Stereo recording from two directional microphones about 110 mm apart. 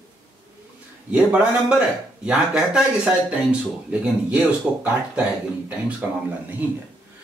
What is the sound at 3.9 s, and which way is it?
Speech, 15° right (ahead or behind).